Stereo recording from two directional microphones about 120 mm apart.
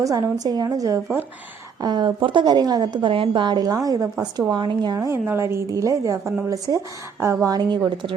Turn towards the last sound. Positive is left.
turn(degrees=-35)  # may be behind; listen again after turning